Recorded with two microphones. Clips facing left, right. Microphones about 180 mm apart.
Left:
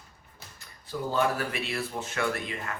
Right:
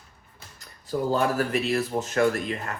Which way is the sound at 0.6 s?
40° right (ahead or behind).